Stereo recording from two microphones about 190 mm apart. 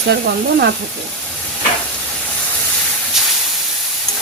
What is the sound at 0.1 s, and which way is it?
Speech, 60° right (ahead or behind).